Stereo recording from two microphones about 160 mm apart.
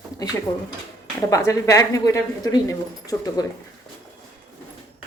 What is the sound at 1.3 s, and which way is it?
Speech, 20° left (ahead or behind).